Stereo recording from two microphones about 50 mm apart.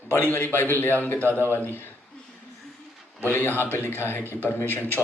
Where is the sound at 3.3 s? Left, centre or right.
Left.